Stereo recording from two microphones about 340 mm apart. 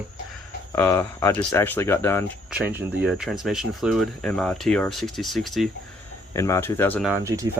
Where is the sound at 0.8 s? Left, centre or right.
Centre.